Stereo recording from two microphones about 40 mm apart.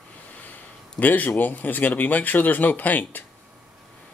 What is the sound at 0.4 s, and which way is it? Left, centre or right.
A man's voice, left.